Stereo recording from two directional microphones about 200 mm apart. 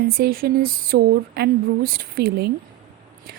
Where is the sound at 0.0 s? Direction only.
50° right (ahead or behind).